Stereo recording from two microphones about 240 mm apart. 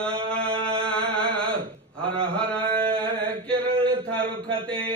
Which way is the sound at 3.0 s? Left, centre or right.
Right.